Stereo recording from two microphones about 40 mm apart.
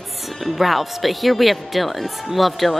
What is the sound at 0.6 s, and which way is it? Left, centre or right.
Speech, centre.